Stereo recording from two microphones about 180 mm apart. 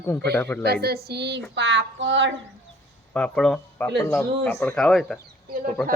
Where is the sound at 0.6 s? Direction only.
60° right (ahead or behind).